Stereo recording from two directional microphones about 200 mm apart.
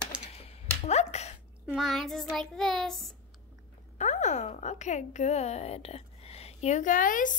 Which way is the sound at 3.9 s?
35° left (ahead or behind).